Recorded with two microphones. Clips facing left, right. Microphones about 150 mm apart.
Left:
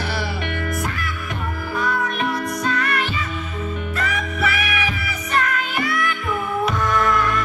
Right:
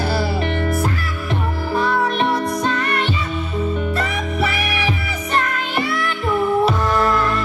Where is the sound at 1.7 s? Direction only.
30° right (ahead or behind).